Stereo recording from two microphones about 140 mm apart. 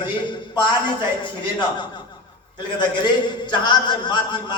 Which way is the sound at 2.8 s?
35° left (ahead or behind).